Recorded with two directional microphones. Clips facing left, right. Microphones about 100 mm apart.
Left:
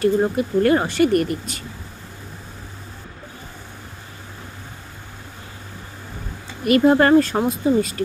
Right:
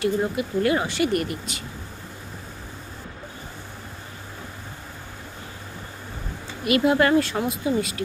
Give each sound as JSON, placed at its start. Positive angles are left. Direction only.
{"t": 0.0, "sound": "speech", "side_deg": 45}
{"t": 6.6, "sound": "speech", "side_deg": 40}